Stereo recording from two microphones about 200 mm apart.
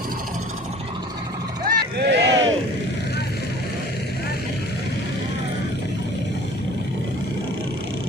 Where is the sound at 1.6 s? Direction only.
55° right (ahead or behind).